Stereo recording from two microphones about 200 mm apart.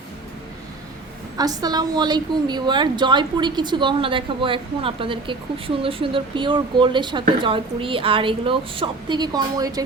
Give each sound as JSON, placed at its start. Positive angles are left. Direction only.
{"t": 1.4, "sound": "a woman's voice", "side_deg": -20}